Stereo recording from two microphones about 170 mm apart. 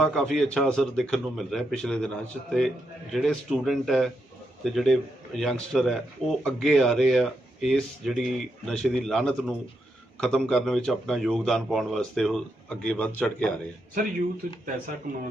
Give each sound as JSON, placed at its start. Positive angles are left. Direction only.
{"t": 0.0, "sound": "speech", "side_deg": 5}
{"t": 15.1, "sound": "speech", "side_deg": -55}